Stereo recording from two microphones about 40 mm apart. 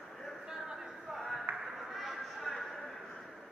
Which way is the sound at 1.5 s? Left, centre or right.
Right.